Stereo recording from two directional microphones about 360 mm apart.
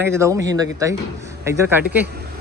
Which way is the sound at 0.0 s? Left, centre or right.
Centre.